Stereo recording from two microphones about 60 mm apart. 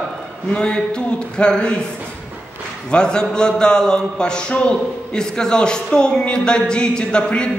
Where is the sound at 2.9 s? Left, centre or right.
Centre.